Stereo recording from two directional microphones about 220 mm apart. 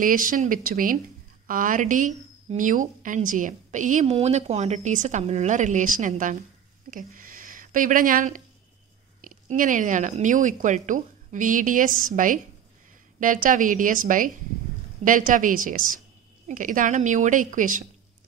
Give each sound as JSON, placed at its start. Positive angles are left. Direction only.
{"t": 0.0, "sound": "speech", "side_deg": -40}